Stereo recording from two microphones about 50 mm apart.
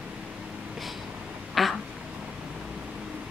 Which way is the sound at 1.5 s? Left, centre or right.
Centre.